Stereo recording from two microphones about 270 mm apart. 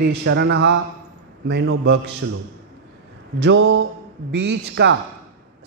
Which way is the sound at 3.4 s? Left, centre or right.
Right.